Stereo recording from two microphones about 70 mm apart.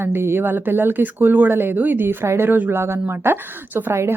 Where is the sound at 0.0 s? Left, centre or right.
Right.